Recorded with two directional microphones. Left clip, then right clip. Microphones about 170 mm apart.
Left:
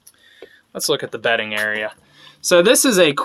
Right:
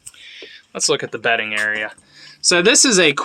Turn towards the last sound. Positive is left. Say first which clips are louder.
# even
turn(degrees=0)  # may be behind; listen again after turning